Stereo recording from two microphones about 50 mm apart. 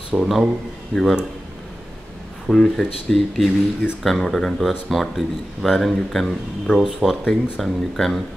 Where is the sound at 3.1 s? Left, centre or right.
Centre.